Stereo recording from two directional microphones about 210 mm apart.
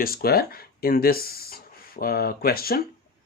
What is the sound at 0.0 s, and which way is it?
Speech, 45° left (ahead or behind).